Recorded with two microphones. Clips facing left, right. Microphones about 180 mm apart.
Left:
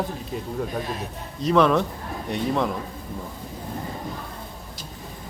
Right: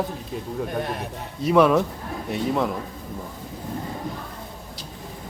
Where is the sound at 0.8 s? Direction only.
60° right (ahead or behind).